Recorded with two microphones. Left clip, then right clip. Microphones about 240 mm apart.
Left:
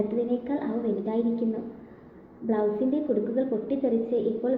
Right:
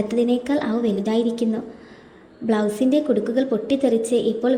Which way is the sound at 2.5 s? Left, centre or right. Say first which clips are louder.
Right 6 dB; right.